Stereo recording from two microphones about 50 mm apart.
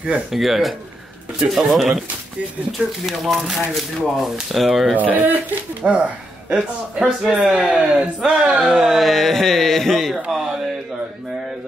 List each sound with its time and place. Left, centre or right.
0.3 s speech: centre
2.8 s speech: right
3.3 s speech: centre
4.9 s speech: right
6.5 s speech: centre
8.5 s speech: centre
9.0 s speech: centre